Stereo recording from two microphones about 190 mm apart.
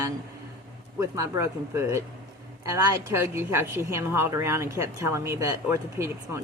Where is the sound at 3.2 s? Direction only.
10° right (ahead or behind).